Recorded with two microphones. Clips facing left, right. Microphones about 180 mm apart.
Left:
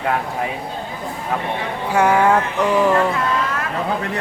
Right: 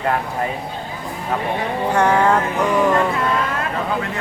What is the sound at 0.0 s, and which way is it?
Speech, 5° left (ahead or behind).